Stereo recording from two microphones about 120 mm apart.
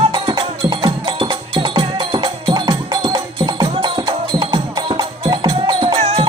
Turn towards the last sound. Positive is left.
turn(degrees=-55)  # may be behind; listen again after turning